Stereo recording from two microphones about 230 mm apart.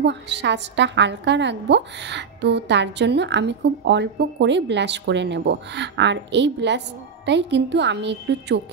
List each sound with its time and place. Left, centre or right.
0.0 s a woman's voice: right